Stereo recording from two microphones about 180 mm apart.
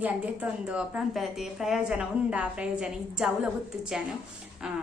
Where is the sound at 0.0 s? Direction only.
5° right (ahead or behind).